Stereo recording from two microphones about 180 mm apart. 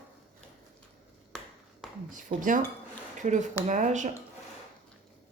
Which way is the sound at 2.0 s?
45° right (ahead or behind).